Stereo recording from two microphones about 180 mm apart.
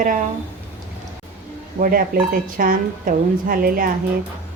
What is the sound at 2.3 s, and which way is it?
Speech, 50° right (ahead or behind).